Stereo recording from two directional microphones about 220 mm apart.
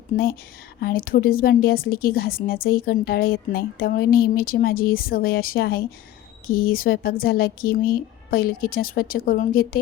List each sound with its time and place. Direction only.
0.1 s speech: 35° left (ahead or behind)